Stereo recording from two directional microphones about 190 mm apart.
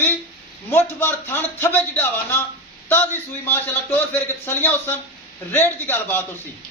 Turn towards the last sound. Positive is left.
turn(degrees=10)  # may be behind; listen again after turning